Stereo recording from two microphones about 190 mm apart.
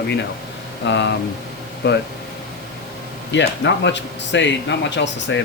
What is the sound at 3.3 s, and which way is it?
Speech, 70° left (ahead or behind).